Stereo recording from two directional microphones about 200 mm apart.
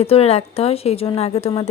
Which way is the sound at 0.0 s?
30° left (ahead or behind).